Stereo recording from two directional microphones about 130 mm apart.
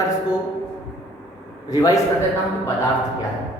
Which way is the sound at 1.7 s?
25° left (ahead or behind).